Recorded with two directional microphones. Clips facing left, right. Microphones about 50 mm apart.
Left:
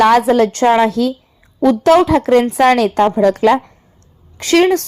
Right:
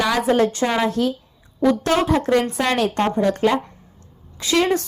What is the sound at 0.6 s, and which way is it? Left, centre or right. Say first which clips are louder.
Speech: left 9 dB; left.